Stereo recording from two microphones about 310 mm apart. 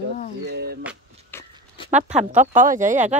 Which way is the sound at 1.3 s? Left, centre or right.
Centre.